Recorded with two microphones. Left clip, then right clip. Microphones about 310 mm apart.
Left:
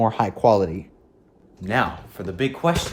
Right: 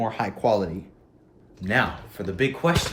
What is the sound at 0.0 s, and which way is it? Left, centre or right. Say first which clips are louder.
Speech: left 6 dB; centre.